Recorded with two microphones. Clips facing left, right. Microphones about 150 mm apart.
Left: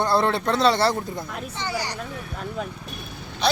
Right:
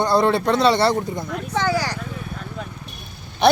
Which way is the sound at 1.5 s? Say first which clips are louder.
Right 9 dB; 90° right.